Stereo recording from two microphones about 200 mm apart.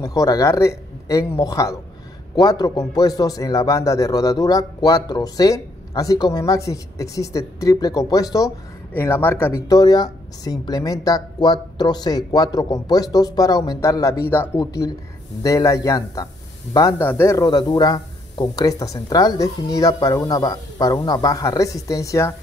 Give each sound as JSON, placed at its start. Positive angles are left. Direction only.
{"t": 0.0, "sound": "a man's voice", "side_deg": 15}